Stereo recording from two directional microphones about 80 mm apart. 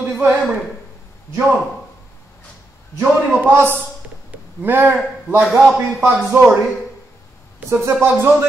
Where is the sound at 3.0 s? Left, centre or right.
Right.